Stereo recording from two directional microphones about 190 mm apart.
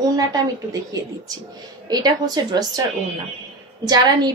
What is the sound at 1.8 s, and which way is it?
Speech, 20° right (ahead or behind).